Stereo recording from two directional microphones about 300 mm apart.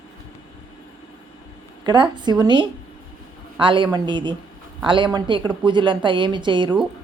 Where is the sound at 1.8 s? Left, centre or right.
Centre.